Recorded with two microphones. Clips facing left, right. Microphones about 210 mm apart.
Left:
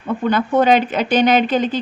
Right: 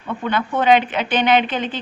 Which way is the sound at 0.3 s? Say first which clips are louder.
Left 2 dB; 40° left (ahead or behind).